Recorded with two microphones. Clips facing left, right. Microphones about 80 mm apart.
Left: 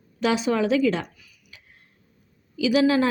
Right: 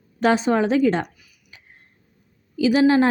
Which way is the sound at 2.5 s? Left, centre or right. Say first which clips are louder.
Right 3 dB; right.